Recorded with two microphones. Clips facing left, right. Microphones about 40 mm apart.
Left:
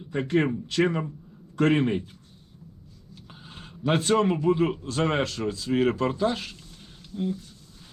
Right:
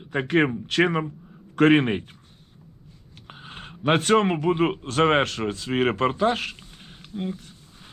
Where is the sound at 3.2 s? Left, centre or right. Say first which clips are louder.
Right 6 dB; right.